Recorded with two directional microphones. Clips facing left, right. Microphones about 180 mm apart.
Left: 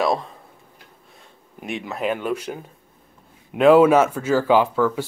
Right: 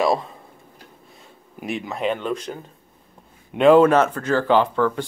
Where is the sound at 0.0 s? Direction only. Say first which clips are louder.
Right 1 dB; centre (ahead or behind).